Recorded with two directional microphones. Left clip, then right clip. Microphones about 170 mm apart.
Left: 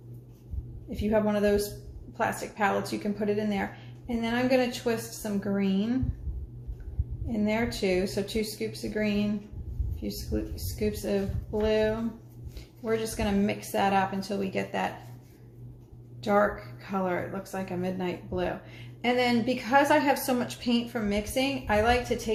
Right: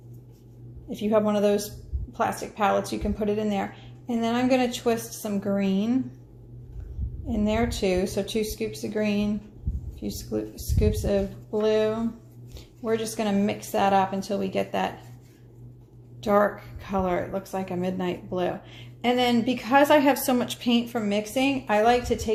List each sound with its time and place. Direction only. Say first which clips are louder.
0.9 s a woman's voice: right 3 dB; 45° right (ahead or behind)
7.3 s a woman's voice: right 3 dB; 40° right (ahead or behind)
16.2 s speech: right 3 dB; 45° right (ahead or behind)